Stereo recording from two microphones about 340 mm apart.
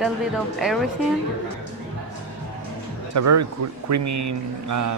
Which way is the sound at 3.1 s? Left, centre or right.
Right.